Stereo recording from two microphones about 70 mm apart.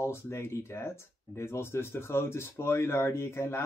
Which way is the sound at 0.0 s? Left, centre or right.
Left.